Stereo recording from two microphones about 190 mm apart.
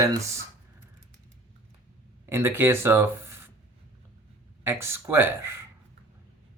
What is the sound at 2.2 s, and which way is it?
Speech, 10° right (ahead or behind).